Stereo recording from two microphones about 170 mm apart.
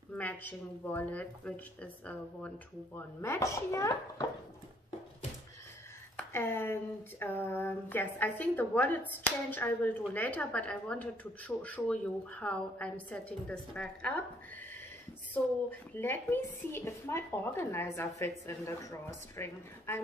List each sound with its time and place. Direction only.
0.2 s a woman's voice: 10° left (ahead or behind)
6.1 s a woman's voice: 15° left (ahead or behind)
15.9 s a woman's voice: 10° left (ahead or behind)